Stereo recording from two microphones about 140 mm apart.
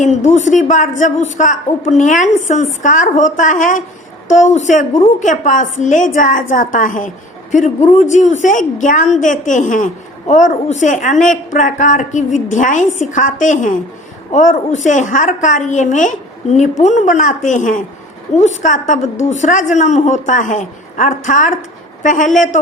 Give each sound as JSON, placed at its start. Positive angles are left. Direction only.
{"t": 0.0, "sound": "a woman's voice", "side_deg": 55}